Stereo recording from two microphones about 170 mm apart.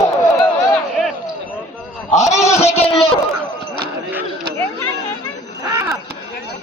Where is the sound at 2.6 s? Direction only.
35° left (ahead or behind).